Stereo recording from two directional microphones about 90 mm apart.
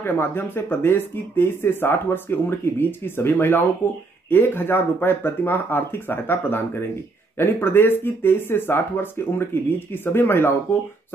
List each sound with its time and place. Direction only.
0.0 s speech: 25° left (ahead or behind)